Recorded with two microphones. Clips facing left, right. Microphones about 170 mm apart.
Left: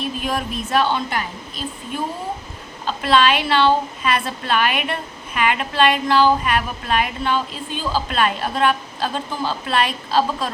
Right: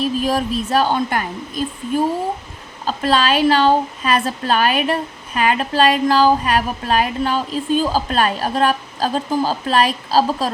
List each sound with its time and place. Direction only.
0.0 s a woman's voice: 35° right (ahead or behind)
2.8 s a woman's voice: 40° right (ahead or behind)